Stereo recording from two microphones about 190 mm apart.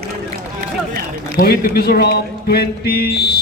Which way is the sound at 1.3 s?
55° left (ahead or behind).